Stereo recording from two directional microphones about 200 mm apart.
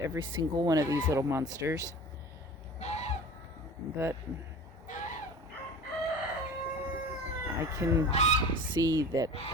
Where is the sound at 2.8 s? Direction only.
35° left (ahead or behind).